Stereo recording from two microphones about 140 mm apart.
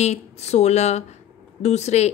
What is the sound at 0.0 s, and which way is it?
A woman's voice, 50° left (ahead or behind).